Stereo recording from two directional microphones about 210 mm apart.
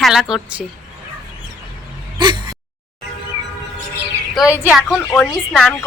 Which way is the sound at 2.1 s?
20° right (ahead or behind).